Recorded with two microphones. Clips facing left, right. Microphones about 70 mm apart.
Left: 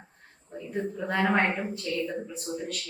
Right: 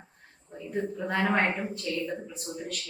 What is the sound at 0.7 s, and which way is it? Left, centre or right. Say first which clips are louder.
Speech: even; centre.